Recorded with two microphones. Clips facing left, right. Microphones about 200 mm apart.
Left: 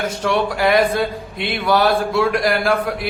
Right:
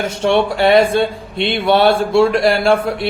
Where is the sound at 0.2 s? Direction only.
25° right (ahead or behind).